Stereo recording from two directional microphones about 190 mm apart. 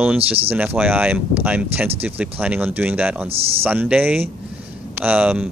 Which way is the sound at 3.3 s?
30° right (ahead or behind).